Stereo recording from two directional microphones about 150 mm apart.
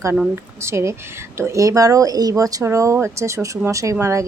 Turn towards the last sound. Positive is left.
turn(degrees=-20)  # may be behind; listen again after turning